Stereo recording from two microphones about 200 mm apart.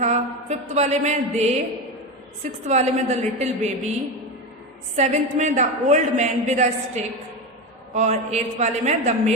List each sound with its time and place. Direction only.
0.0 s a woman's voice: 35° right (ahead or behind)
4.9 s a woman's voice: 35° right (ahead or behind)